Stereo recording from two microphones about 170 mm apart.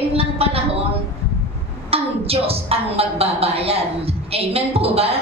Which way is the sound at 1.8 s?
35° right (ahead or behind).